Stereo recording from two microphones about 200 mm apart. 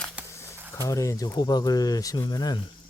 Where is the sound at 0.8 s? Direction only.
15° left (ahead or behind).